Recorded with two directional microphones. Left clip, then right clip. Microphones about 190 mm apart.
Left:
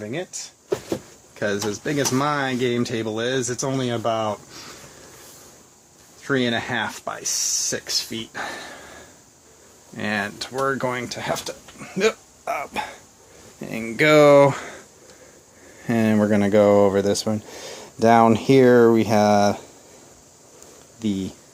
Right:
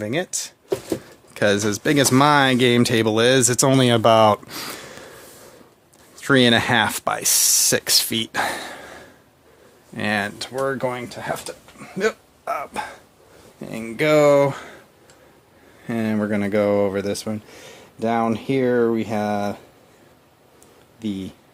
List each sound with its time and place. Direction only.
0.0 s speech: 50° right (ahead or behind)
6.2 s speech: 50° right (ahead or behind); by 11.3 s centre (ahead or behind)
11.3 s dog: 10° left (ahead or behind)
13.6 s speech: centre (ahead or behind); by 14.8 s 15° left (ahead or behind)
15.8 s speech: 15° left (ahead or behind)
21.0 s speech: 15° left (ahead or behind)